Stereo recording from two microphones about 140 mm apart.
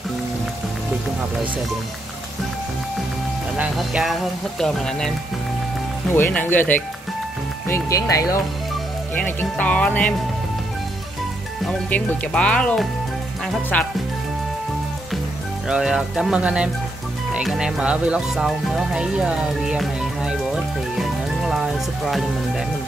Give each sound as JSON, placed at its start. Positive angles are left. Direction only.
{"t": 3.7, "sound": "speech", "side_deg": 0}
{"t": 6.1, "sound": "speech", "side_deg": 15}
{"t": 9.1, "sound": "speech", "side_deg": 10}
{"t": 11.6, "sound": "speech", "side_deg": 10}
{"t": 15.7, "sound": "speech", "side_deg": -5}